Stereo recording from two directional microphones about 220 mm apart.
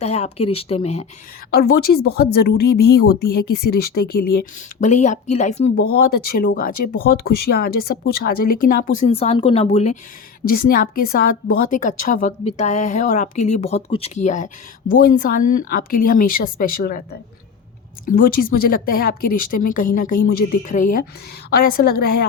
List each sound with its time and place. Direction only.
0.0 s speech: 30° left (ahead or behind)
1.5 s speech: 45° left (ahead or behind)
10.4 s a woman's voice: 40° left (ahead or behind)